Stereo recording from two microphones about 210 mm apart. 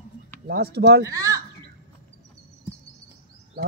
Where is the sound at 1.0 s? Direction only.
15° right (ahead or behind).